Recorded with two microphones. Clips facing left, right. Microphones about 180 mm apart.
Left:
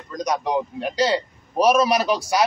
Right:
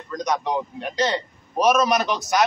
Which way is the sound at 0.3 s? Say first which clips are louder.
Left 2 dB; 10° left (ahead or behind).